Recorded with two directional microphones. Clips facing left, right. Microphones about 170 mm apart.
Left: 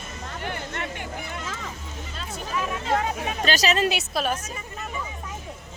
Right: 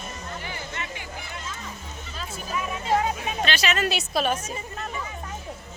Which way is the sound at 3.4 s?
40° left (ahead or behind).